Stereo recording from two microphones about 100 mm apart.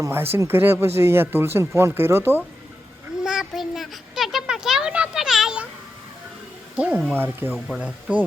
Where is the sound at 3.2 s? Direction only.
5° right (ahead or behind).